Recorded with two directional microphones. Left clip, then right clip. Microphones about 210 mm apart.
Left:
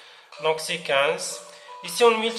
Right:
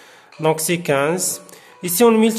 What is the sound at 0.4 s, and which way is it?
Speech, 50° right (ahead or behind).